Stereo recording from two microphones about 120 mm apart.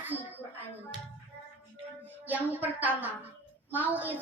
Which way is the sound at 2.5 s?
15° right (ahead or behind).